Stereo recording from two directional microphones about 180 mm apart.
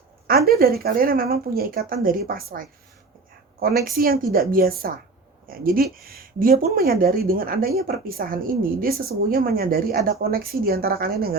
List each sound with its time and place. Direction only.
0.3 s a woman's voice: 55° right (ahead or behind)